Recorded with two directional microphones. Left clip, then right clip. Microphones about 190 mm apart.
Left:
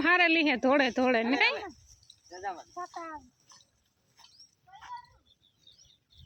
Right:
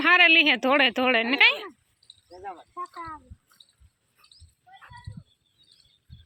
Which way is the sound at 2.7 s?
50° left (ahead or behind).